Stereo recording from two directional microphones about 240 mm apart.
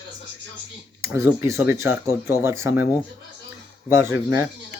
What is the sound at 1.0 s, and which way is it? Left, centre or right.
Speech, centre.